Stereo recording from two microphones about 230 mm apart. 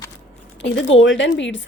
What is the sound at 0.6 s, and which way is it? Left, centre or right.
A woman's voice, left.